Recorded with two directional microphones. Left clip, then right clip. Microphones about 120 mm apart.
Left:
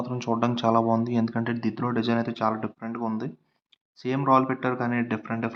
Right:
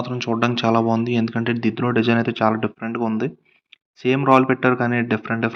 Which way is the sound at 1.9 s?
35° right (ahead or behind).